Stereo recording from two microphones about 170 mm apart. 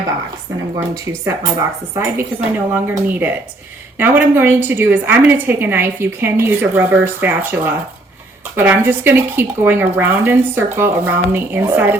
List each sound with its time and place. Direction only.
1.0 s a woman's voice: 15° right (ahead or behind)